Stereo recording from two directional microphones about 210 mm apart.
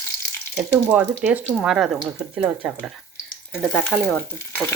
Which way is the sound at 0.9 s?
5° right (ahead or behind).